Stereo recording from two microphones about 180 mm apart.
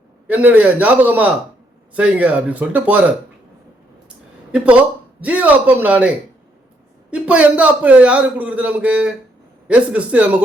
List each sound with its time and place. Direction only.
0.3 s a man's voice: 10° right (ahead or behind)
4.5 s a man's voice: 5° right (ahead or behind)
7.1 s a man's voice: 5° right (ahead or behind)